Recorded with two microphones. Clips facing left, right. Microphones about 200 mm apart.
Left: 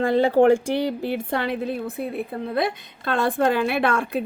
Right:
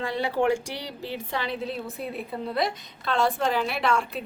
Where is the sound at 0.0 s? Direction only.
50° left (ahead or behind).